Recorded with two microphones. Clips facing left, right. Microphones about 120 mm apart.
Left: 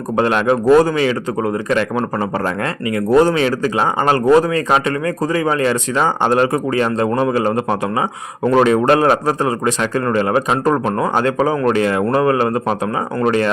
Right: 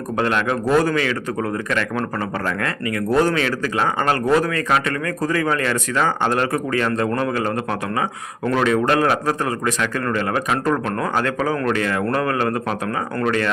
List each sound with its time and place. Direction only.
0.2 s speech: 25° left (ahead or behind)